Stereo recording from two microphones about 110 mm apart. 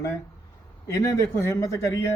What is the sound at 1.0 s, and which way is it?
Speech, 30° left (ahead or behind).